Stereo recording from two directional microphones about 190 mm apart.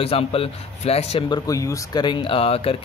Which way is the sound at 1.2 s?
20° left (ahead or behind).